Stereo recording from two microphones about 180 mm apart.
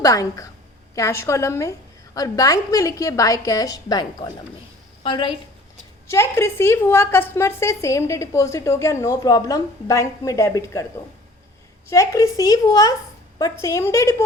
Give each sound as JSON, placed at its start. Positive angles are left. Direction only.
{"t": 0.0, "sound": "a woman's voice", "side_deg": 20}
{"t": 6.1, "sound": "a woman's voice", "side_deg": 15}
{"t": 11.9, "sound": "a woman's voice", "side_deg": 15}